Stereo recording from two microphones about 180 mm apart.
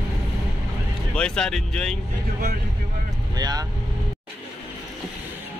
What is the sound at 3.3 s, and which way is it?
Speech, 20° right (ahead or behind).